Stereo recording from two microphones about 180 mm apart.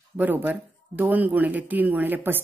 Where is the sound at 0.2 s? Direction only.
10° right (ahead or behind).